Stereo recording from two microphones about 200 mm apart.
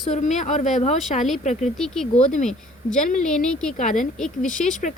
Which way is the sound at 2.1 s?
35° left (ahead or behind).